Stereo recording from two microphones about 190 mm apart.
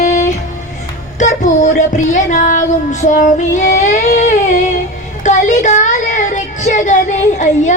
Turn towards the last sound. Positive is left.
turn(degrees=40)  # may be behind; listen again after turning